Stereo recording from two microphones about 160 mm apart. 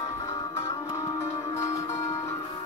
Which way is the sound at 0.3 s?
20° left (ahead or behind).